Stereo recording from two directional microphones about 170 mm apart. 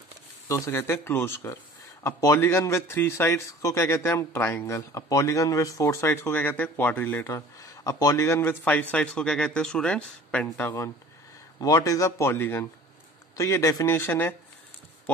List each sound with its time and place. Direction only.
0.5 s speech: 15° left (ahead or behind)
11.6 s speech: 20° left (ahead or behind)